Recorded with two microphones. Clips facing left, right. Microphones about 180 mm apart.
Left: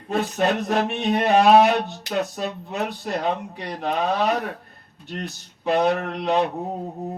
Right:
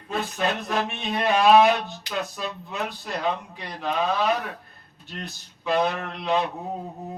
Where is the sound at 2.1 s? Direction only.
55° left (ahead or behind).